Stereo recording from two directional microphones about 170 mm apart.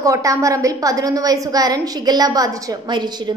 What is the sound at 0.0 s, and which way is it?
A woman's voice, 20° right (ahead or behind).